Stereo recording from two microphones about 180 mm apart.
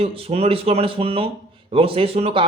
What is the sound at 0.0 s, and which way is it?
Speech, 30° right (ahead or behind).